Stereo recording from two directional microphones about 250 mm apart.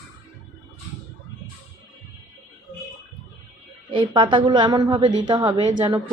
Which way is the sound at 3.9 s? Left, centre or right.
Centre.